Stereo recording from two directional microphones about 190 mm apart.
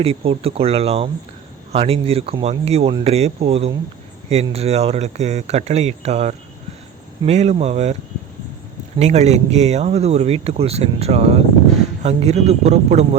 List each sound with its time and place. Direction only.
0.0 s speech: 30° right (ahead or behind)
9.0 s speech: 35° right (ahead or behind)